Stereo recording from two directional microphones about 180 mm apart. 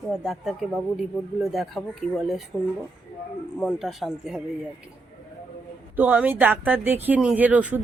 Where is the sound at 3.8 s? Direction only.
Centre (ahead or behind).